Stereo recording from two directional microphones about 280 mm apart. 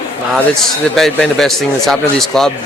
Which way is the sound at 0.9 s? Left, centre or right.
Centre.